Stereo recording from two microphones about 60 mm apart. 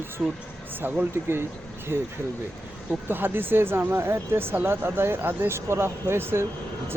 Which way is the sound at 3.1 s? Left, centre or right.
Right.